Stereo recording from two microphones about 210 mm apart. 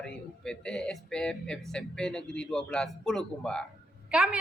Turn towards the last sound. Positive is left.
turn(degrees=0)  # may be behind; listen again after turning